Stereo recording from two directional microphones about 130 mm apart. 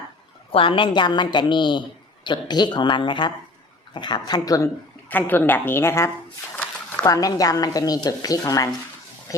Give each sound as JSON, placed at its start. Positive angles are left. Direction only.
{"t": 0.5, "sound": "a woman's voice", "side_deg": 45}
{"t": 5.0, "sound": "a woman's voice", "side_deg": 15}
{"t": 7.0, "sound": "a woman's voice", "side_deg": 30}